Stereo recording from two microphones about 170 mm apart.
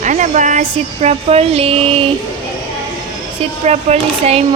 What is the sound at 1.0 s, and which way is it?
Speech, 35° right (ahead or behind).